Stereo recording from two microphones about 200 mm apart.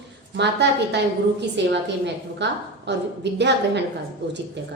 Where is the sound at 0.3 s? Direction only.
60° right (ahead or behind).